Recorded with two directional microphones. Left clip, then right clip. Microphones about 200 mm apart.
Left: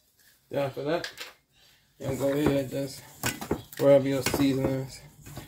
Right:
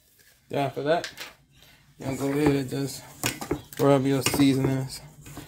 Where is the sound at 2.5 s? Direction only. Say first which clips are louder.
Even; 50° right (ahead or behind).